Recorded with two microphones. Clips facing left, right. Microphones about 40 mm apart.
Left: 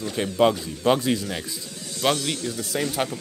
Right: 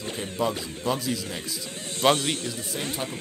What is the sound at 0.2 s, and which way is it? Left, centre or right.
Speech, left.